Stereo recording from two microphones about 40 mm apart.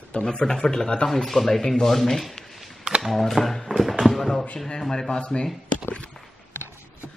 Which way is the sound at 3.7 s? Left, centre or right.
Centre.